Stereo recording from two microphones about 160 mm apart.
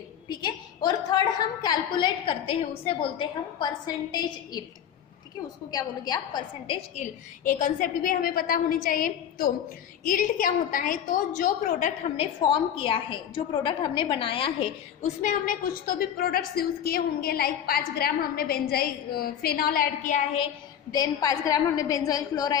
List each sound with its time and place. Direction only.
0.3 s a woman's voice: 25° left (ahead or behind)
5.7 s a woman's voice: 25° left (ahead or behind)
6.9 s a woman's voice: 50° left (ahead or behind)
15.2 s a woman's voice: 60° left (ahead or behind)
20.9 s a woman's voice: 25° left (ahead or behind)